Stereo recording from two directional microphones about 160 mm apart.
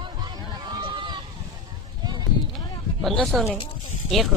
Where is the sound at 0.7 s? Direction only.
30° right (ahead or behind).